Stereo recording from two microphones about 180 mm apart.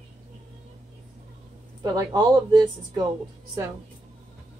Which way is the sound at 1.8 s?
20° right (ahead or behind).